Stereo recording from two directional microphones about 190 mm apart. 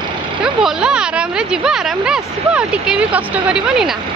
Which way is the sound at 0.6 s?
5° right (ahead or behind).